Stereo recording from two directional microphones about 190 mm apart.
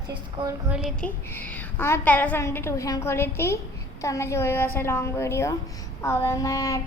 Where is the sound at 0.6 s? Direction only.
Centre (ahead or behind).